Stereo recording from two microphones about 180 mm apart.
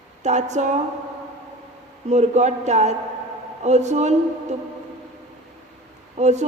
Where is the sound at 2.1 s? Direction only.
40° right (ahead or behind).